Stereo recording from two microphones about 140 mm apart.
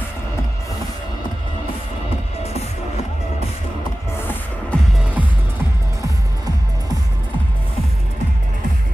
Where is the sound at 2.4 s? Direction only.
50° left (ahead or behind).